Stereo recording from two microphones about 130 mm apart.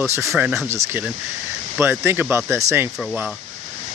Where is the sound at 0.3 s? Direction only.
5° right (ahead or behind).